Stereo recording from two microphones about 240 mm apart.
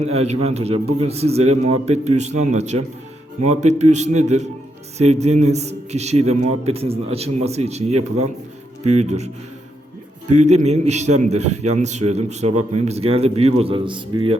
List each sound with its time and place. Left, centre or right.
0.0 s a man's voice: right